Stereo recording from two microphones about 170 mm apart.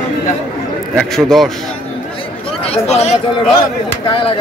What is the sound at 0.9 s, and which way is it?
Speech, centre (ahead or behind).